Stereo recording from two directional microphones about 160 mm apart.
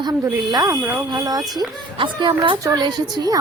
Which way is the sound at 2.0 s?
30° right (ahead or behind).